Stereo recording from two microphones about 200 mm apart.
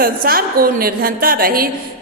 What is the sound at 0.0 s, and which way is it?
A woman's voice, 45° right (ahead or behind).